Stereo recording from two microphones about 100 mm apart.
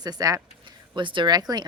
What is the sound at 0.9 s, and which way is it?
Speech, 55° right (ahead or behind).